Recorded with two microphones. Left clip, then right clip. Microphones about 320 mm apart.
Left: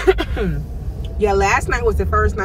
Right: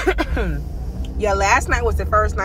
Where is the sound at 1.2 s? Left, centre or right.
Centre.